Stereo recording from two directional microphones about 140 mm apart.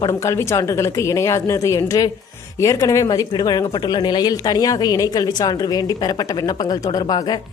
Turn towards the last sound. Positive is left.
turn(degrees=30)  # may be behind; listen again after turning